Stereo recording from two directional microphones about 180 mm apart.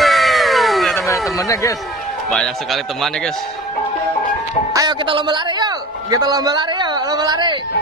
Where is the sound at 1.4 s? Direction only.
20° left (ahead or behind).